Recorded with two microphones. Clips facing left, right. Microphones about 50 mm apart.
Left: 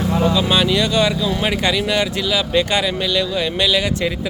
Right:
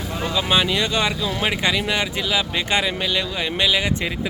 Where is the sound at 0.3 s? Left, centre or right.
Centre.